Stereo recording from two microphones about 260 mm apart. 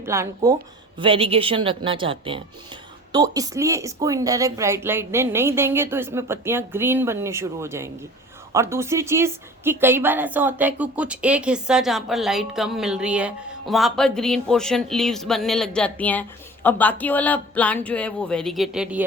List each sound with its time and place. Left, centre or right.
0.0 s a woman's voice: centre